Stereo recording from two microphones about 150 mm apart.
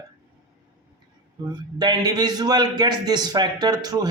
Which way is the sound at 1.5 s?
30° right (ahead or behind).